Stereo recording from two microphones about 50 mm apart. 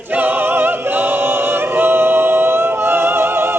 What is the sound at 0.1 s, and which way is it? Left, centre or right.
Choir, right.